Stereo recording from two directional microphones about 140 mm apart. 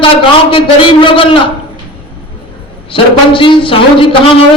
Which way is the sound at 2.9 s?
40° left (ahead or behind).